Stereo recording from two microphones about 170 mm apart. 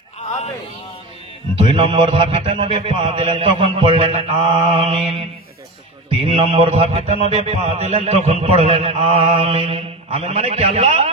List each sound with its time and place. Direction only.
1.5 s a man's voice: 35° right (ahead or behind)